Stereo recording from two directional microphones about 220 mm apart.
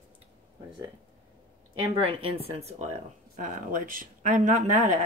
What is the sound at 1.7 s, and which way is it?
Speech, 25° right (ahead or behind).